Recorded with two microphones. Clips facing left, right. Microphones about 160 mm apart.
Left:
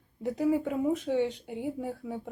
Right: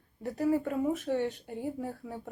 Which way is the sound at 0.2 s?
15° left (ahead or behind).